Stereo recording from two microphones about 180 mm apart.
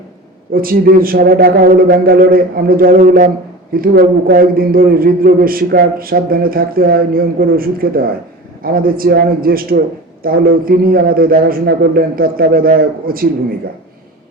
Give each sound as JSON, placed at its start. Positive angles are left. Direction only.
{"t": 0.5, "sound": "a man's voice", "side_deg": -55}